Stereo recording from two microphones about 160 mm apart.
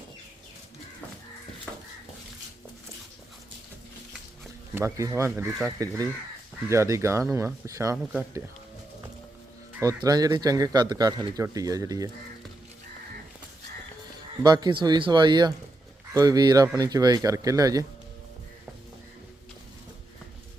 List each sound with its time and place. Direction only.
4.7 s speech: 15° right (ahead or behind)
9.8 s speech: 25° right (ahead or behind)
14.4 s speech: 25° right (ahead or behind)